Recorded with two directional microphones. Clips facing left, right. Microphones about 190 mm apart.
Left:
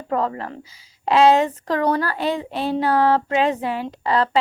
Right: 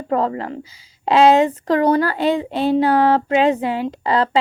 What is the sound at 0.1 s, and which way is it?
Speech, 30° right (ahead or behind).